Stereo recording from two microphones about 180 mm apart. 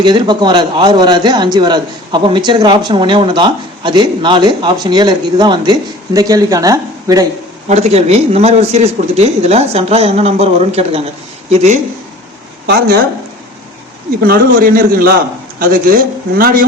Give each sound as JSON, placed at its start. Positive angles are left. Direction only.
{"t": 0.0, "sound": "a man's voice", "side_deg": -25}
{"t": 7.7, "sound": "speech", "side_deg": -35}
{"t": 12.6, "sound": "speech", "side_deg": -65}
{"t": 14.2, "sound": "a man's voice", "side_deg": -55}